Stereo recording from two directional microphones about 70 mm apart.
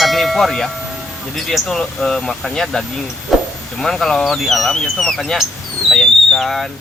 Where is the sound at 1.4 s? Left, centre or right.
Centre.